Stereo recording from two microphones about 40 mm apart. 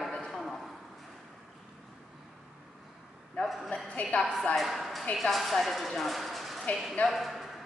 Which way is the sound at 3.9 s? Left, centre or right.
Left.